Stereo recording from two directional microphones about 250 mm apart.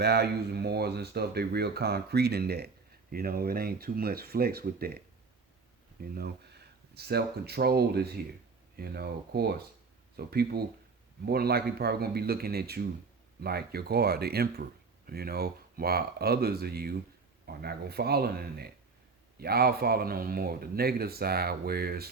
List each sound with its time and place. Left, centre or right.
0.0 s speech: right